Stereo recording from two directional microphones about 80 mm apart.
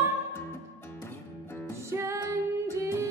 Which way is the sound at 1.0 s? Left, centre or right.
Left.